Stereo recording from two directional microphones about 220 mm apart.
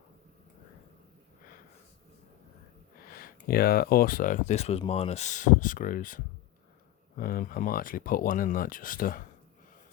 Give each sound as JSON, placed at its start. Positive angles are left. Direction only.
{"t": 3.1, "sound": "speech", "side_deg": 40}